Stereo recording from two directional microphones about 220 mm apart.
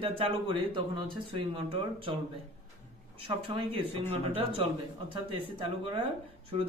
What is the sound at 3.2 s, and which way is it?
Speech, 25° right (ahead or behind).